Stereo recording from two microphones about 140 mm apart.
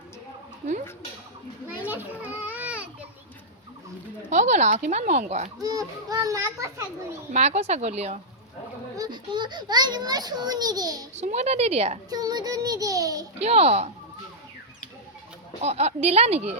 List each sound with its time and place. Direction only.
1.8 s a sound: 10° right (ahead or behind)
4.3 s speech: 55° right (ahead or behind)
5.5 s a child's voice: 25° right (ahead or behind)
7.3 s speech: 55° right (ahead or behind)
9.0 s a child's voice: 30° right (ahead or behind)
11.2 s speech: 50° right (ahead or behind)
12.1 s a child's voice: 25° right (ahead or behind)
13.4 s speech: 50° right (ahead or behind)
15.6 s speech: 50° right (ahead or behind)